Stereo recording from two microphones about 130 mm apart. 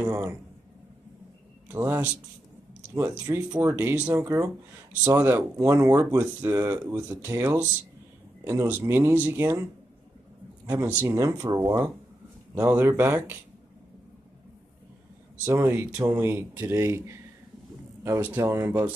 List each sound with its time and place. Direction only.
0.0 s speech: 20° right (ahead or behind)
1.7 s speech: 15° right (ahead or behind)
10.7 s speech: 20° right (ahead or behind)
15.4 s speech: 20° right (ahead or behind)